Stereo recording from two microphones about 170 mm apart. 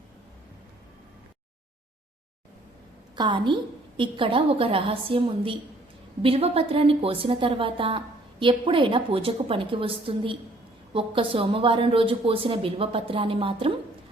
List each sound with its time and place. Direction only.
3.2 s a woman's voice: 25° right (ahead or behind)